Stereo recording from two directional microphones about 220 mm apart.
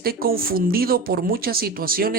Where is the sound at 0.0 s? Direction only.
45° right (ahead or behind).